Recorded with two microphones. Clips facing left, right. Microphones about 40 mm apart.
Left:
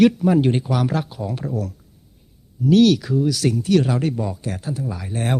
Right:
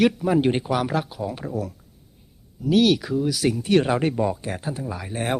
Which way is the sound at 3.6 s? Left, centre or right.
Right.